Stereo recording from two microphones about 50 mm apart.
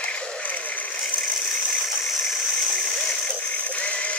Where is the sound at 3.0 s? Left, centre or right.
Left.